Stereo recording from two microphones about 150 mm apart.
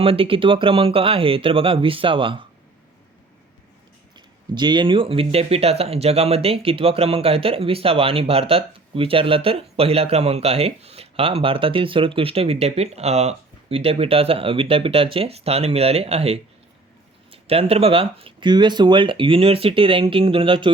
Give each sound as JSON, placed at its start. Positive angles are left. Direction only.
{"t": 0.0, "sound": "speech", "side_deg": -40}
{"t": 4.1, "sound": "speech", "side_deg": -30}